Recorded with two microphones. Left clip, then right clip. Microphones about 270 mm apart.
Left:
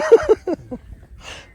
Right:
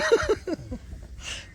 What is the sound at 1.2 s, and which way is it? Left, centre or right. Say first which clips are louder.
Snort: even; centre.